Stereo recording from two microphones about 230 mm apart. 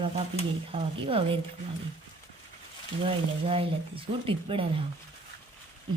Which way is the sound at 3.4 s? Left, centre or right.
Right.